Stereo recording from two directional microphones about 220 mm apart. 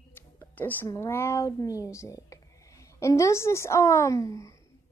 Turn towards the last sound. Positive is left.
turn(degrees=15)  # may be behind; listen again after turning